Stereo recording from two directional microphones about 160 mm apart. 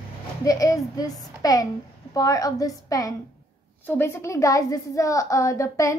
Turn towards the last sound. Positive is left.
turn(degrees=20)  # may be behind; listen again after turning